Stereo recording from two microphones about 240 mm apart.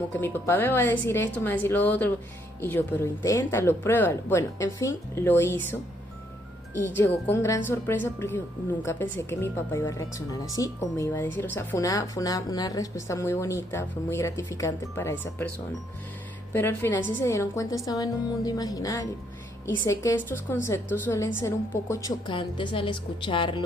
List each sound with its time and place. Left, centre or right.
0.1 s speech: centre
6.7 s a woman's voice: centre